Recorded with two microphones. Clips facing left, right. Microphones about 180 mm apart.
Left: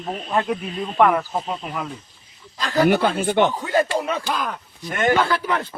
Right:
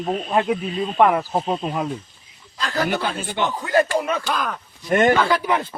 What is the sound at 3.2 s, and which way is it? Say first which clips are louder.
Speech: left 8 dB; 60° left (ahead or behind).